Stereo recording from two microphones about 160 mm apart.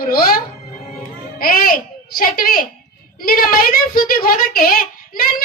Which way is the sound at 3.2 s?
65° left (ahead or behind).